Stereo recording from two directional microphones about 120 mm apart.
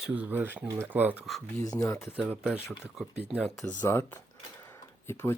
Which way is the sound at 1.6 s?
25° left (ahead or behind).